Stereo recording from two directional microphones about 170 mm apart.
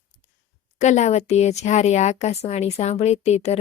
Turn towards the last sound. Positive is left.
turn(degrees=40)  # may be behind; listen again after turning